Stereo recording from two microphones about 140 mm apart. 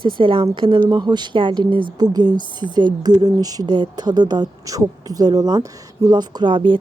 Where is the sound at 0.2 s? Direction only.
40° right (ahead or behind).